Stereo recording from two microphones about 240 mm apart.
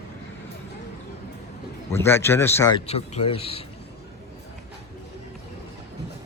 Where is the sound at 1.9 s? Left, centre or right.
Centre.